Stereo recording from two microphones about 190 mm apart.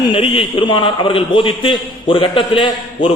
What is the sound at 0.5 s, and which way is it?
A man's voice, 25° left (ahead or behind).